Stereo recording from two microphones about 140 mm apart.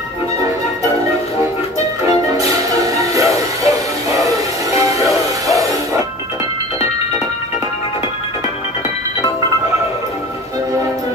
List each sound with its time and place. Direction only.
2.4 s music: 25° right (ahead or behind)